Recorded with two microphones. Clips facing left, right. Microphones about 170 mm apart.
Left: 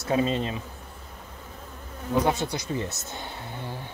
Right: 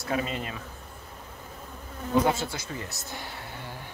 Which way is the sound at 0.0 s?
25° left (ahead or behind).